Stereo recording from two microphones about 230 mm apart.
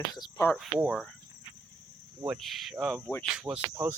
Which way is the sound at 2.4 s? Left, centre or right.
Centre.